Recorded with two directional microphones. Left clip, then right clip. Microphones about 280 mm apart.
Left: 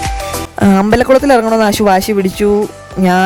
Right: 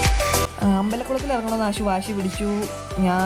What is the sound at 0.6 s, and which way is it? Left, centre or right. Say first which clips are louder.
Speech: left 14 dB; left.